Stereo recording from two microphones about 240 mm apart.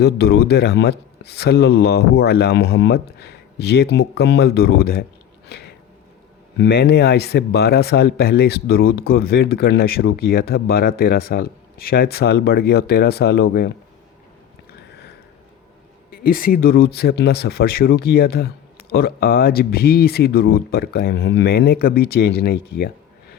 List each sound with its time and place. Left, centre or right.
0.0 s a man's voice: left
5.5 s a sound: left
6.6 s speech: left
16.1 s speech: left